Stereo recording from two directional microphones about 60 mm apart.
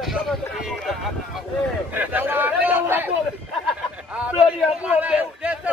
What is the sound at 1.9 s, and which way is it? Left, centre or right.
A man's voice, right.